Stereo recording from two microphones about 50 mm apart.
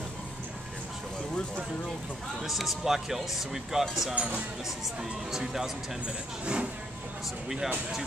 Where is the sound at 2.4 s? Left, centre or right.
Centre.